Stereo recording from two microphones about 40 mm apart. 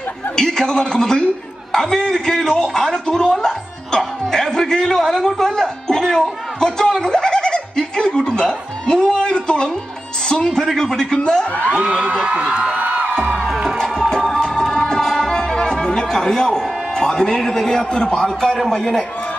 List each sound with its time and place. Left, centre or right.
0.4 s a man's voice: centre
4.3 s music: centre
8.8 s a sound: centre
10.2 s music: centre
10.8 s a man's voice: centre
11.7 s a sound: right
12.7 s music: right
13.5 s music: centre
13.9 s music: centre
16.9 s a man's voice: centre